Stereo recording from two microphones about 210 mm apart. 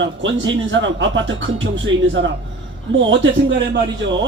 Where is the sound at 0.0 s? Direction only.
60° right (ahead or behind).